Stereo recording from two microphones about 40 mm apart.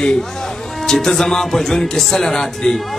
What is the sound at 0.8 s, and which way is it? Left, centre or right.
A man's voice, centre.